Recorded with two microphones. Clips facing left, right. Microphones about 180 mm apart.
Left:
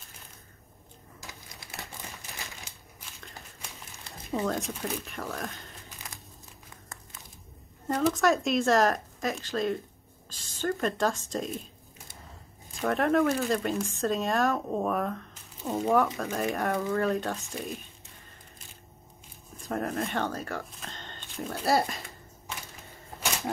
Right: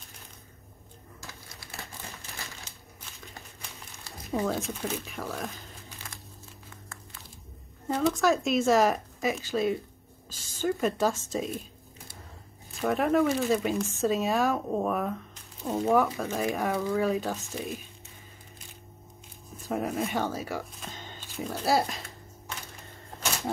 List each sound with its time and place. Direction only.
1.6 s crumpling: 20° left (ahead or behind)
4.5 s speech: centre (ahead or behind)
7.9 s a woman's voice: centre (ahead or behind)
12.8 s speech: centre (ahead or behind)
19.5 s speech: 5° right (ahead or behind)